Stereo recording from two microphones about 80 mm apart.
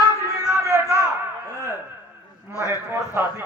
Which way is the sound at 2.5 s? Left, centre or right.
Left.